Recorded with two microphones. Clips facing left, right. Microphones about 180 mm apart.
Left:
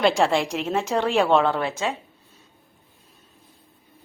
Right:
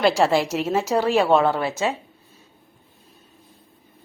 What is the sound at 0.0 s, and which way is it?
A woman's voice, centre (ahead or behind).